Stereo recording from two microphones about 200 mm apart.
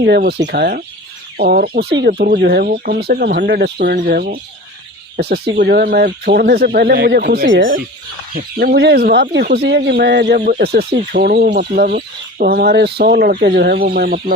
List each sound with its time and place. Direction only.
0.0 s speech: 55° right (ahead or behind); by 7.7 s 70° right (ahead or behind)
8.4 s speech: 50° right (ahead or behind)
10.4 s speech: 45° right (ahead or behind)